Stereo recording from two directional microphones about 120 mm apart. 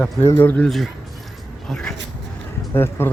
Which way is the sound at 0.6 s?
Centre (ahead or behind).